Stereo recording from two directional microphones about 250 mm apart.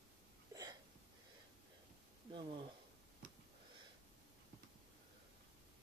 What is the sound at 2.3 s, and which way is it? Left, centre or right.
Speech, centre.